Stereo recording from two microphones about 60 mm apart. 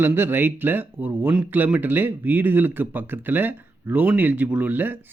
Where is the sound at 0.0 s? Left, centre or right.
Right.